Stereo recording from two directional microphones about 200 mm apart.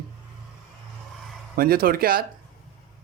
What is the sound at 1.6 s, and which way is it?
Speech, 50° right (ahead or behind).